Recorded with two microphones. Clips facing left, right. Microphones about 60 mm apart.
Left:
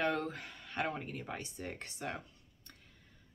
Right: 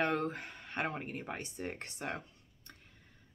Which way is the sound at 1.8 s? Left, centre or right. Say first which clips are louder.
Right 1 dB; right.